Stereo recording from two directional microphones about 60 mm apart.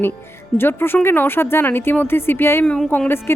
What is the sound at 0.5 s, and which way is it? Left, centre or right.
Speech, left.